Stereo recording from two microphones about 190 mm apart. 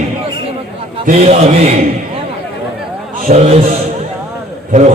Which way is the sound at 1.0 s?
35° right (ahead or behind).